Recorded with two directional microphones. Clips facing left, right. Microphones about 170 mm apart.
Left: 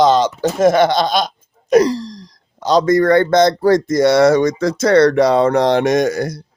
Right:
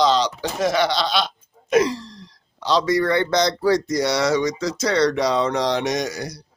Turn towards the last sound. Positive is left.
turn(degrees=55)  # may be behind; listen again after turning